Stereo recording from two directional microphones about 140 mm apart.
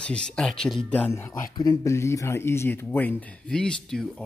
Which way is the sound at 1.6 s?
25° left (ahead or behind).